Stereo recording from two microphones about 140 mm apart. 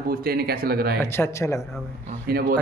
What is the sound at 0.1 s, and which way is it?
Speech, 90° right.